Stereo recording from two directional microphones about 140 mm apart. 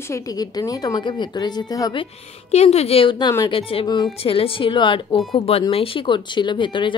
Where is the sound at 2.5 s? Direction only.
50° left (ahead or behind).